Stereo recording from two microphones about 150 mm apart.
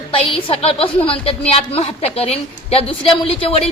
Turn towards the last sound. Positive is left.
turn(degrees=40)  # may be behind; listen again after turning